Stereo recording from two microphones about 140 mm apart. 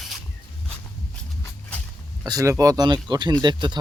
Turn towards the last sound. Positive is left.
turn(degrees=-30)  # may be behind; listen again after turning